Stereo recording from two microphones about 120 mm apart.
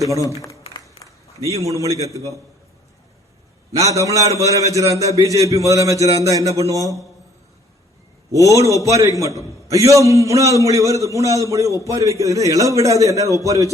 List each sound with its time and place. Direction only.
1.6 s a man's voice: 25° right (ahead or behind)
3.7 s a man's voice: 25° right (ahead or behind)
8.3 s a man's voice: 25° right (ahead or behind)